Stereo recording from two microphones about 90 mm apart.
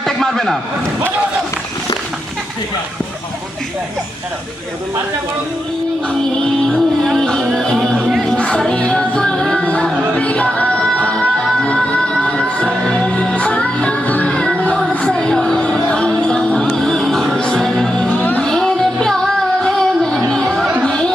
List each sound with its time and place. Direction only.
0.0 s music: 5° left (ahead or behind)
6.7 s music: 5° left (ahead or behind)
12.2 s music: 10° left (ahead or behind)
18.1 s music: 20° left (ahead or behind)
18.4 s music: 5° left (ahead or behind)